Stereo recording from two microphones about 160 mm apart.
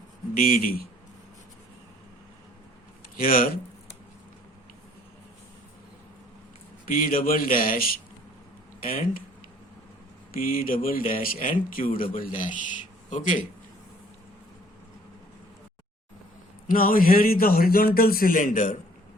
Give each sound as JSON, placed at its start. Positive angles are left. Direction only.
{"t": 0.3, "sound": "a man's voice", "side_deg": 65}
{"t": 3.2, "sound": "a man's voice", "side_deg": 65}
{"t": 6.8, "sound": "a man's voice", "side_deg": 60}
{"t": 10.3, "sound": "a man's voice", "side_deg": 60}
{"t": 16.6, "sound": "a man's voice", "side_deg": 60}